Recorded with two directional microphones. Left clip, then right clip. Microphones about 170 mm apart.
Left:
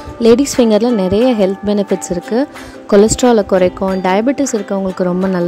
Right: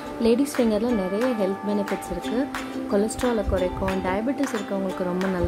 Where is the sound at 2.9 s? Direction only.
55° left (ahead or behind).